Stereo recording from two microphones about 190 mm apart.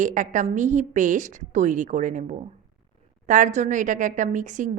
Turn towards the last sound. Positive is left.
turn(degrees=-40)  # may be behind; listen again after turning